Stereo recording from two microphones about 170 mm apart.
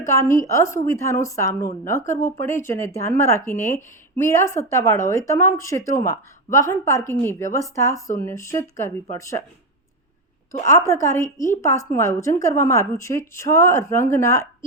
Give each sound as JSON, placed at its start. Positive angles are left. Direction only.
{"t": 0.0, "sound": "a woman's voice", "side_deg": 15}
{"t": 2.0, "sound": "speech", "side_deg": 45}
{"t": 2.6, "sound": "a woman's voice", "side_deg": 15}
{"t": 10.7, "sound": "a woman's voice", "side_deg": 20}